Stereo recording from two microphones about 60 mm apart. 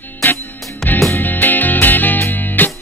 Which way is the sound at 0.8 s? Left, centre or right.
Centre.